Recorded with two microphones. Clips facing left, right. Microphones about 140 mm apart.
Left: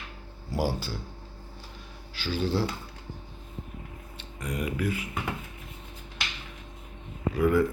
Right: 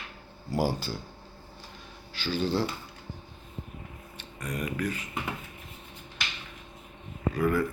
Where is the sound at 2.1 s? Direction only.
5° left (ahead or behind).